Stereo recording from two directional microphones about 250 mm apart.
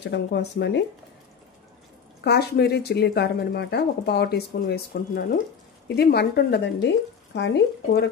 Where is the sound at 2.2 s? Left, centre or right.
Left.